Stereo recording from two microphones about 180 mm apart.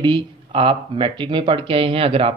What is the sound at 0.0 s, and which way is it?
Speech, 25° right (ahead or behind).